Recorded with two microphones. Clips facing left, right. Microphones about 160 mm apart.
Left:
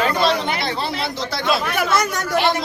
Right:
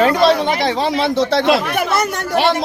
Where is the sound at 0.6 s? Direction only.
90° right; by 1.6 s 70° right (ahead or behind).